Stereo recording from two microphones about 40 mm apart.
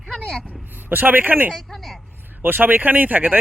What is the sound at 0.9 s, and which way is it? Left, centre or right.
A man's voice, right.